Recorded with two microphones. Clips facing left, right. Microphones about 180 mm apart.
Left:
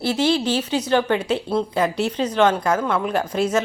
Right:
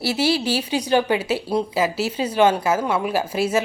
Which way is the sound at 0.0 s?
10° right (ahead or behind).